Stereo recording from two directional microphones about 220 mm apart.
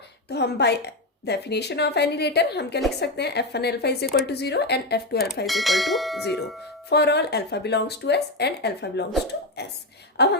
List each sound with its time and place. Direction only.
0.3 s a woman's voice: 50° left (ahead or behind)
5.5 s bell: centre (ahead or behind)
6.9 s a woman's voice: 50° left (ahead or behind)